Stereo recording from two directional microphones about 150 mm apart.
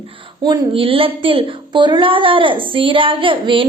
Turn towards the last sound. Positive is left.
turn(degrees=-35)  # may be behind; listen again after turning